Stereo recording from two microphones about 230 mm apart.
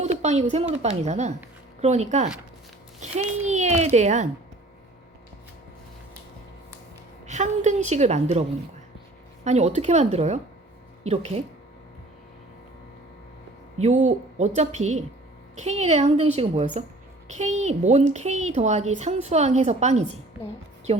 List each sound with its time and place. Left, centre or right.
0.0 s a sound: right
0.8 s a woman's voice: right
7.3 s a woman's voice: right
13.8 s a woman's voice: right